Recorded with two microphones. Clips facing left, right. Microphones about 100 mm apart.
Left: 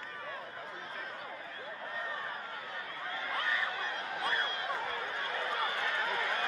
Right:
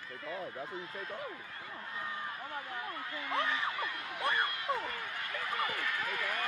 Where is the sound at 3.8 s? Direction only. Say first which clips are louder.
Even; 30° left (ahead or behind).